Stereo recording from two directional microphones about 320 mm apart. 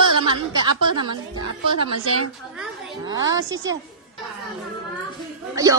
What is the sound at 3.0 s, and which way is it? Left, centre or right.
Speech, centre.